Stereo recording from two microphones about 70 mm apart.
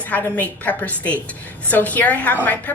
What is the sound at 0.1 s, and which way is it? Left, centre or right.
Speech, left.